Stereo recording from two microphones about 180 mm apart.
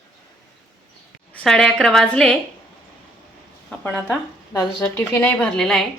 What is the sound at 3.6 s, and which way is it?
A woman's voice, 5° left (ahead or behind).